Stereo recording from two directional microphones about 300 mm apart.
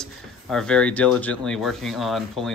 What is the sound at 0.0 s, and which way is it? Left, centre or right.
Speech, centre.